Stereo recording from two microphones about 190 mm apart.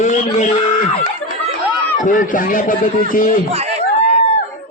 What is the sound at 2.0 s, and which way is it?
A man's voice, 45° left (ahead or behind).